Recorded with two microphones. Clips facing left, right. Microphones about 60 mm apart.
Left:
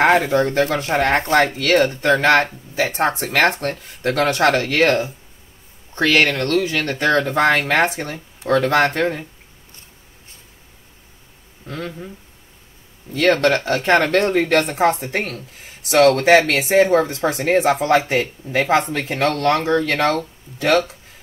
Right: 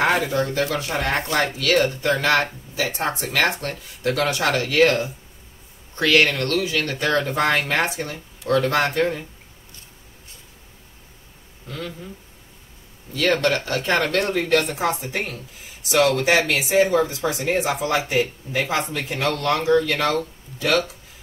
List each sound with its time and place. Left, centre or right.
0.0 s speech: left
6.0 s speech: left
6.3 s speech: left
8.5 s speech: left
11.6 s speech: left
13.1 s speech: left